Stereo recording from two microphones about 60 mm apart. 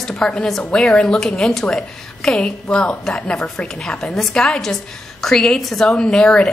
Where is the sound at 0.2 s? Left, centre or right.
Centre.